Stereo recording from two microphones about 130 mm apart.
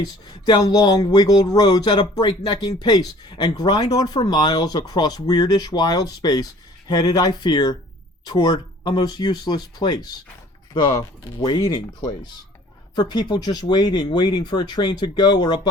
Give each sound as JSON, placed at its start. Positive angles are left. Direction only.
{"t": 0.0, "sound": "speech", "side_deg": 30}
{"t": 11.4, "sound": "speech", "side_deg": 35}